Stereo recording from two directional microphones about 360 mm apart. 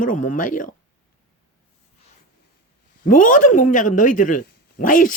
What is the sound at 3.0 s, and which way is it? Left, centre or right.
Speech, left.